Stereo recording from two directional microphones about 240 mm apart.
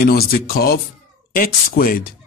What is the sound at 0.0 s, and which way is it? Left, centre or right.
Speech, left.